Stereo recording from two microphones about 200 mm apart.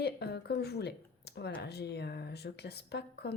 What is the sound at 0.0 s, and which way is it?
Speech, 55° left (ahead or behind).